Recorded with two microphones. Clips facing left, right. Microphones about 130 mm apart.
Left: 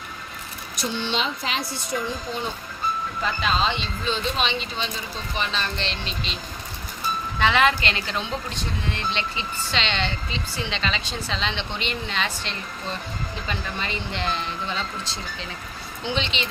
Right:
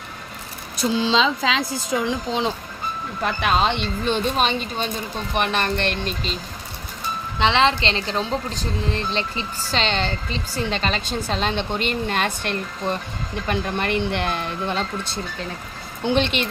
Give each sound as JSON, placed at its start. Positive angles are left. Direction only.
{"t": 1.0, "sound": "a woman's voice", "side_deg": -90}
{"t": 3.2, "sound": "speech", "side_deg": -60}
{"t": 5.3, "sound": "speech", "side_deg": -60}
{"t": 7.3, "sound": "a woman's voice", "side_deg": -25}